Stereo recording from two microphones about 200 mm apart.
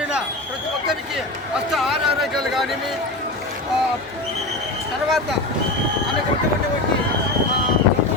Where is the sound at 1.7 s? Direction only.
Centre (ahead or behind).